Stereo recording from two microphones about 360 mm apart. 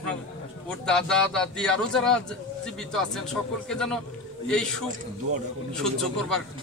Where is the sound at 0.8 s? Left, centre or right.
Centre.